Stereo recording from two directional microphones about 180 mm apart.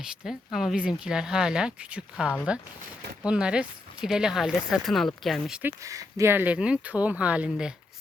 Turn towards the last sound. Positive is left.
turn(degrees=-5)  # may be behind; listen again after turning